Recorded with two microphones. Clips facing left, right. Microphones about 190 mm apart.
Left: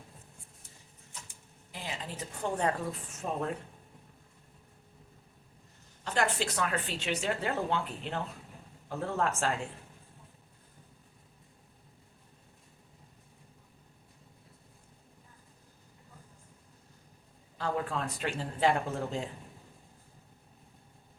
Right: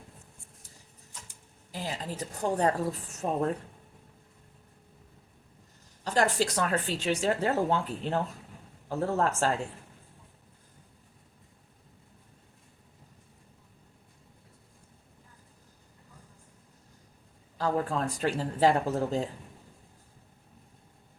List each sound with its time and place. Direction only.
1.7 s a woman's voice: 40° right (ahead or behind)
6.1 s a woman's voice: 40° right (ahead or behind)
17.6 s a woman's voice: 40° right (ahead or behind)